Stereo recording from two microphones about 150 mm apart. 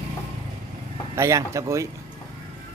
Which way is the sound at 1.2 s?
20° right (ahead or behind).